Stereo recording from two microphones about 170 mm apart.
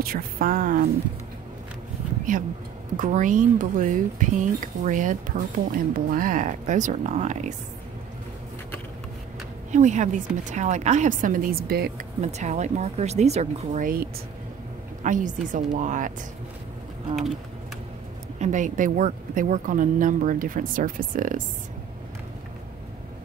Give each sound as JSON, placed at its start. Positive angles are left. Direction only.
{"t": 0.0, "sound": "speech", "side_deg": -60}
{"t": 3.0, "sound": "speech", "side_deg": -50}
{"t": 9.7, "sound": "speech", "side_deg": -45}
{"t": 12.2, "sound": "speech", "side_deg": -40}
{"t": 15.0, "sound": "speech", "side_deg": -50}
{"t": 18.4, "sound": "speech", "side_deg": -45}